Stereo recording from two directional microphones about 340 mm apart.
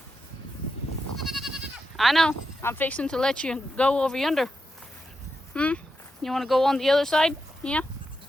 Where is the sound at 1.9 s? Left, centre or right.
Centre.